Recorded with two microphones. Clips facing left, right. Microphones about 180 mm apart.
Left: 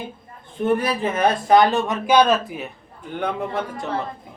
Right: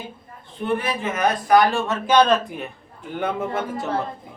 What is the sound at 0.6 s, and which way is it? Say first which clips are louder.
A man's voice: left 4 dB; 40° left (ahead or behind).